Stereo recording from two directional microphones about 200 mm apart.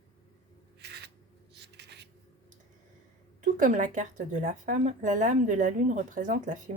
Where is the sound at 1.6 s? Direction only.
60° right (ahead or behind).